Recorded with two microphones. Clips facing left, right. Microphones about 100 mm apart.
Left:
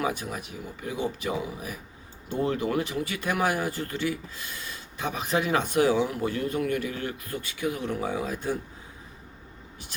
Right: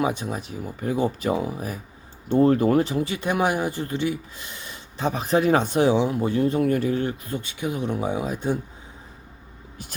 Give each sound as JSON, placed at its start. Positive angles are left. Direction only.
{"t": 0.0, "sound": "speech", "side_deg": -25}
{"t": 0.8, "sound": "speech", "side_deg": -45}